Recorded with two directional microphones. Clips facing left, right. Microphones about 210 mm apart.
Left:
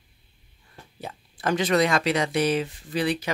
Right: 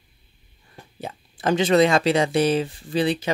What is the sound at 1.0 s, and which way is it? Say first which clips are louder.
Speech: right 4 dB; 25° right (ahead or behind).